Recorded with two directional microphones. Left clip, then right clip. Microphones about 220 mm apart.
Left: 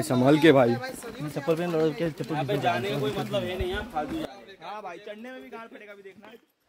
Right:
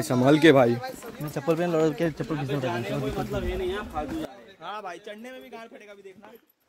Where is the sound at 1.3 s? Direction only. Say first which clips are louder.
Right 2 dB; 20° right (ahead or behind).